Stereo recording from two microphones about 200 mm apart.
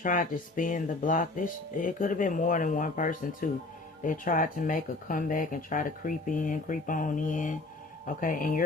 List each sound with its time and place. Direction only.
0.0 s speech: 40° left (ahead or behind)